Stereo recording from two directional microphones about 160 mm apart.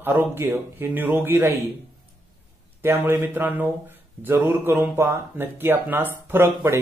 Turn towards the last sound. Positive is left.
turn(degrees=-15)  # may be behind; listen again after turning